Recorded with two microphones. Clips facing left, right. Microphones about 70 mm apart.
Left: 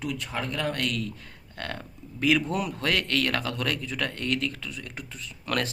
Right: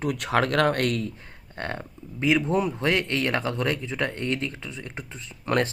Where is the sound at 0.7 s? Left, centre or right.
Right.